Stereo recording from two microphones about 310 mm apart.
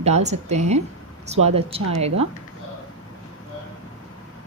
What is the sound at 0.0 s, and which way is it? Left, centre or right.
A woman's voice, right.